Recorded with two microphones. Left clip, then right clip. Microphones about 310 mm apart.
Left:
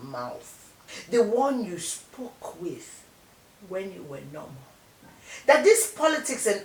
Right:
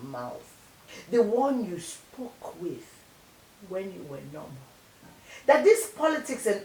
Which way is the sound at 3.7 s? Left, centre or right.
Centre.